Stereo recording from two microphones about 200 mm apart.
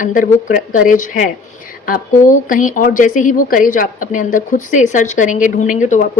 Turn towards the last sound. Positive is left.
turn(degrees=40)  # may be behind; listen again after turning